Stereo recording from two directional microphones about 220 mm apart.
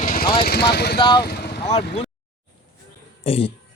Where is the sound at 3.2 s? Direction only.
25° left (ahead or behind).